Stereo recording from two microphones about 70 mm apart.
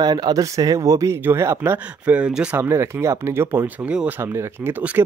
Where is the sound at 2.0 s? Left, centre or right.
Right.